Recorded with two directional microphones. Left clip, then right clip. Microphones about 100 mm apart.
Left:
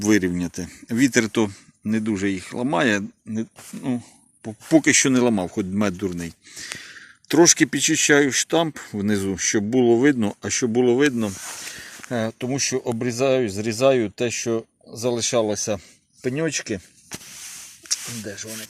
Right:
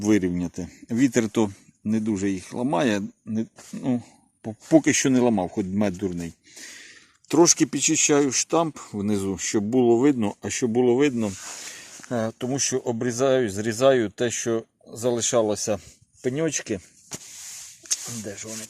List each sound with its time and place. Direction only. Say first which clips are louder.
0.0 s speech: left 2 dB; 20° right (ahead or behind)
1.2 s speech: left 2 dB; 30° right (ahead or behind)
1.8 s speech: left 2 dB; 20° right (ahead or behind)
3.3 s speech: even; 70° right (ahead or behind)
4.7 s speech: left 2 dB; 25° right (ahead or behind)
5.2 s speech: left 1 dB; 10° right (ahead or behind)
6.7 s speech: left 6 dB; centre (ahead or behind)
18.2 s speech: left 2 dB; centre (ahead or behind)